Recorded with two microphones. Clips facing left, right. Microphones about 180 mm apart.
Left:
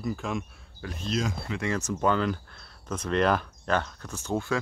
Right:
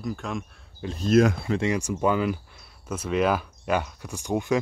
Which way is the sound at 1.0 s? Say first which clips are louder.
Right 11 dB; 55° right (ahead or behind).